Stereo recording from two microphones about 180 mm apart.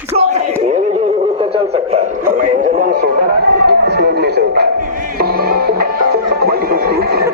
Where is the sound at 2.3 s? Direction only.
50° right (ahead or behind).